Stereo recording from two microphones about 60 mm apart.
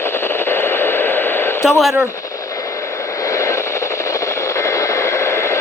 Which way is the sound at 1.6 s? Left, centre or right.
Centre.